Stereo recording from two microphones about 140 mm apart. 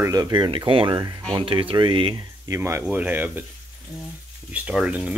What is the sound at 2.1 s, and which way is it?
Speech, 25° right (ahead or behind).